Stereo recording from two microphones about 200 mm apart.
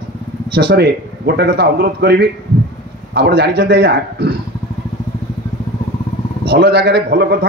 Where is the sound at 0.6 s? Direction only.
55° right (ahead or behind).